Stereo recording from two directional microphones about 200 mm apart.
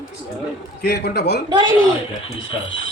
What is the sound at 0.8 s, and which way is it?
Speech, 50° left (ahead or behind).